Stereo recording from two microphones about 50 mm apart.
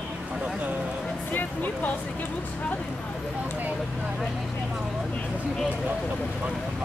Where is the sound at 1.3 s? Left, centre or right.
Left.